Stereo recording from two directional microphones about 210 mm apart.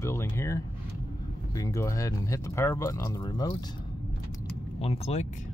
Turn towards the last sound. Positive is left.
turn(degrees=35)  # may be behind; listen again after turning